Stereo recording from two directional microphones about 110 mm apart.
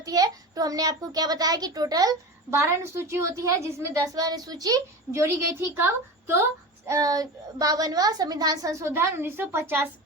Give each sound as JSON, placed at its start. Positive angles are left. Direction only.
{"t": 0.0, "sound": "a child's voice", "side_deg": -35}